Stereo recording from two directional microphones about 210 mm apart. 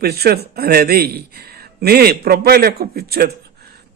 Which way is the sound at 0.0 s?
50° right (ahead or behind).